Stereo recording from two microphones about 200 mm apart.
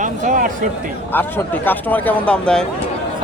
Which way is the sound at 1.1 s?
10° left (ahead or behind).